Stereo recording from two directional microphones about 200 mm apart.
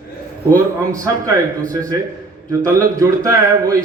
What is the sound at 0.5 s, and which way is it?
Speech, 15° right (ahead or behind).